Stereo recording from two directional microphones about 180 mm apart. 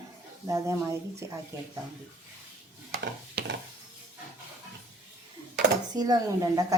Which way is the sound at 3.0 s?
75° right (ahead or behind).